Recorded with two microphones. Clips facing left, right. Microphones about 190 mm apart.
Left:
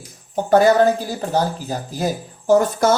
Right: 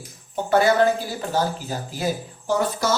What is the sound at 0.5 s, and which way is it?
Speech, 40° left (ahead or behind).